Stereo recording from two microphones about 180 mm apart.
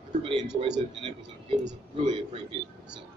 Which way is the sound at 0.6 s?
25° right (ahead or behind).